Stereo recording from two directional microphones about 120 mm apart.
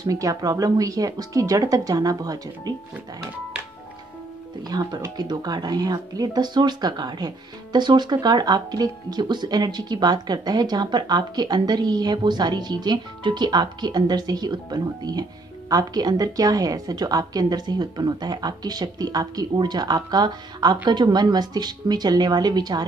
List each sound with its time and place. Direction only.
0.0 s speech: 30° right (ahead or behind)
4.6 s speech: 35° right (ahead or behind)